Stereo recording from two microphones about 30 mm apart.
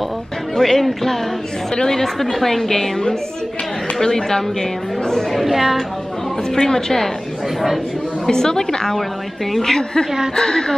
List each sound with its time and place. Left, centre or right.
0.6 s a woman's voice: centre
5.3 s a woman's voice: centre
6.5 s a woman's voice: left
8.3 s a woman's voice: left